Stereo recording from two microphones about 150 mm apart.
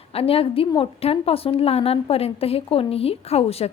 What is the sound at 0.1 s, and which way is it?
A woman's voice, 40° left (ahead or behind).